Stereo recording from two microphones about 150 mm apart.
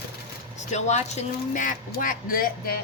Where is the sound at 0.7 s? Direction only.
50° left (ahead or behind); by 2.7 s 75° left (ahead or behind).